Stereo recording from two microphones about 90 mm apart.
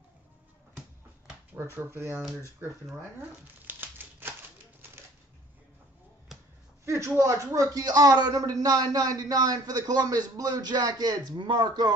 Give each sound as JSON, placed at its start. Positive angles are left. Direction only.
{"t": 1.5, "sound": "speech", "side_deg": -25}
{"t": 2.6, "sound": "typewriter", "side_deg": -25}
{"t": 6.8, "sound": "a sound", "side_deg": -30}
{"t": 7.2, "sound": "speech", "side_deg": -35}